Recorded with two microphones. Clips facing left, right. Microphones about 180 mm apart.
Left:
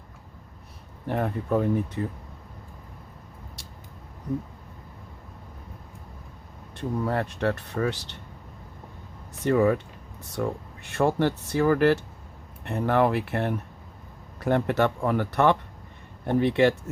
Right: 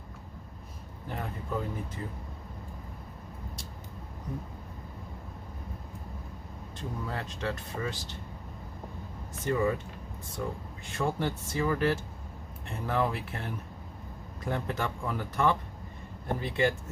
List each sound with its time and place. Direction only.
1.0 s speech: 65° left (ahead or behind)
6.7 s speech: 60° left (ahead or behind)
9.4 s speech: 65° left (ahead or behind)